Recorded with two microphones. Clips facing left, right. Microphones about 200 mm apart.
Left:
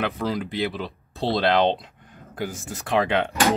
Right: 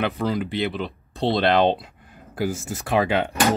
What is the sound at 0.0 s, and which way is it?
Speech, centre (ahead or behind).